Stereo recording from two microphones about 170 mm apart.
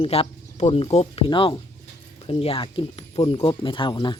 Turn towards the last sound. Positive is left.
turn(degrees=25)  # may be behind; listen again after turning